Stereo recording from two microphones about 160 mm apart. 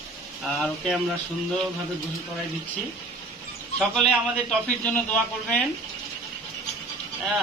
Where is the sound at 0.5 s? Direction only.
Centre (ahead or behind).